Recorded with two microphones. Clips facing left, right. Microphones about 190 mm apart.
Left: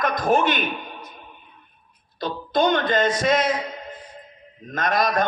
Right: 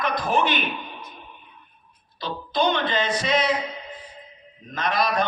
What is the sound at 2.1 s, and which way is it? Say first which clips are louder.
Speech: left 3 dB; 45° left (ahead or behind).